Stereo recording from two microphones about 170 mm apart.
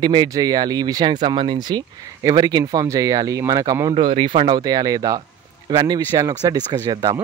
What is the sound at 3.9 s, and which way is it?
Speech, 30° right (ahead or behind).